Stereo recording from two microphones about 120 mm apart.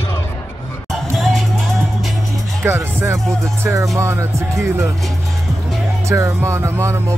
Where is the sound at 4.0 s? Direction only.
25° right (ahead or behind).